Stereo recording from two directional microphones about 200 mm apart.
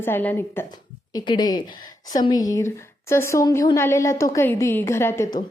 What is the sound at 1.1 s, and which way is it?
A woman's voice, 20° left (ahead or behind).